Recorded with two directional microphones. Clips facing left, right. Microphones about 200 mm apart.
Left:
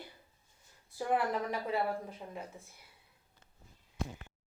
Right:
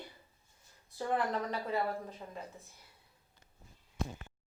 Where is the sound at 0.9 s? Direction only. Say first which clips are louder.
Left 1 dB; 10° left (ahead or behind).